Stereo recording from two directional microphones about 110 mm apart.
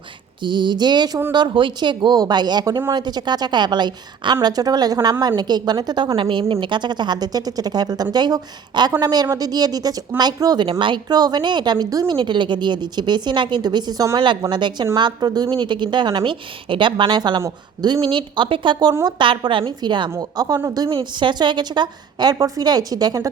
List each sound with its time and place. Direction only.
0.4 s a woman's voice: 45° right (ahead or behind)
10.7 s a woman's voice: 50° right (ahead or behind)